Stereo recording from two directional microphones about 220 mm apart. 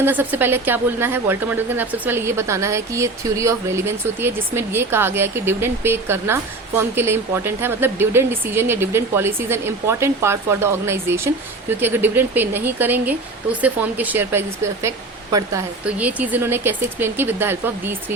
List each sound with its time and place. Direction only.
0.0 s a woman's voice: 10° right (ahead or behind)